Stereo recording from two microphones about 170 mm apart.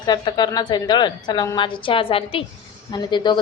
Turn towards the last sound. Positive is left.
turn(degrees=25)  # may be behind; listen again after turning